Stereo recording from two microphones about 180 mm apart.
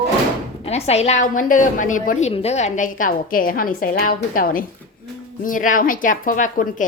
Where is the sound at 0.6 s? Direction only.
35° left (ahead or behind).